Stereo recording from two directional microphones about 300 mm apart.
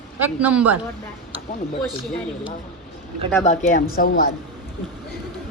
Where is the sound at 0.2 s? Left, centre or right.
Centre.